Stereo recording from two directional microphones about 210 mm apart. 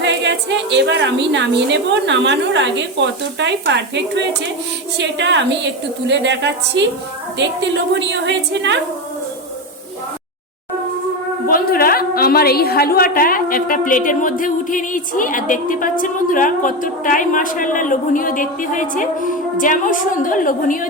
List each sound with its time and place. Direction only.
0.0 s a woman's voice: 60° right (ahead or behind)
11.4 s a woman's voice: 45° left (ahead or behind)